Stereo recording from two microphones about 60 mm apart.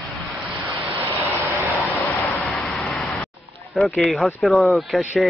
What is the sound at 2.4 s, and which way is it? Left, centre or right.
Vehicle, centre.